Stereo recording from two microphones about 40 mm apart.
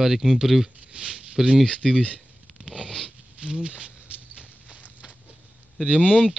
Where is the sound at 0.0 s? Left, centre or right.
Centre.